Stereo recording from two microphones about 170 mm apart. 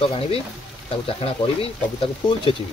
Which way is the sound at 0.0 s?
35° left (ahead or behind).